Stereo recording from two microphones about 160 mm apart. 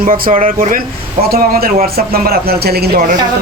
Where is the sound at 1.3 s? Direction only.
70° right (ahead or behind).